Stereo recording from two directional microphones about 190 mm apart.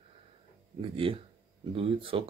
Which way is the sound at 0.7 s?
30° right (ahead or behind).